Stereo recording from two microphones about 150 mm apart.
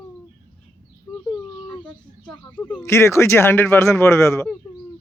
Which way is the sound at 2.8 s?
20° left (ahead or behind).